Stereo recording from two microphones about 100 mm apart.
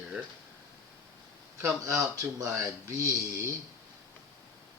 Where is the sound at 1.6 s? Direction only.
30° right (ahead or behind).